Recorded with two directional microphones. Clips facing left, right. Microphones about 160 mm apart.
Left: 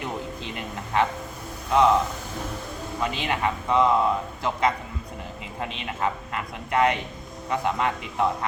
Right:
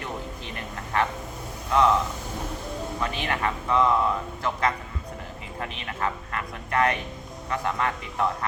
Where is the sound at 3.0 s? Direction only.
20° left (ahead or behind).